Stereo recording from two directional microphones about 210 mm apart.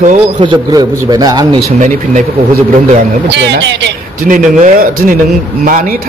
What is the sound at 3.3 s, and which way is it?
Speech, 55° right (ahead or behind).